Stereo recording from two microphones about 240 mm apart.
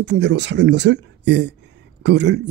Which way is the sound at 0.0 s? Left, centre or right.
Right.